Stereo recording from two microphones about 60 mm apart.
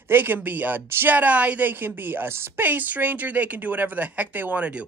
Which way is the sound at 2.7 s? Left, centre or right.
Right.